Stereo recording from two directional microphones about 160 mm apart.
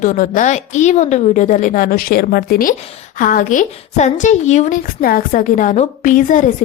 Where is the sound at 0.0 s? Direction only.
55° left (ahead or behind).